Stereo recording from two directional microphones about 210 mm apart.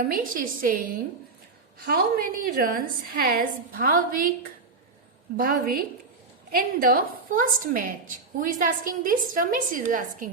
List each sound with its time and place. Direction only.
0.0 s a woman's voice: 40° right (ahead or behind)
5.4 s a woman's voice: 45° right (ahead or behind)